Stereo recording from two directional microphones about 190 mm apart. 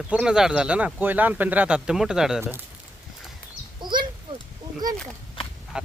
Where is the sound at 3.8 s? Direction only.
25° right (ahead or behind).